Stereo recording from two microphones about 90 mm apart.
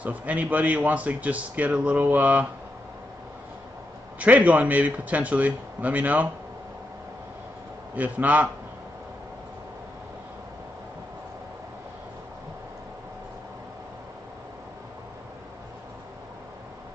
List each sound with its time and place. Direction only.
0.0 s a man's voice: 15° right (ahead or behind)
4.2 s a man's voice: 15° right (ahead or behind)
7.9 s a man's voice: 15° right (ahead or behind)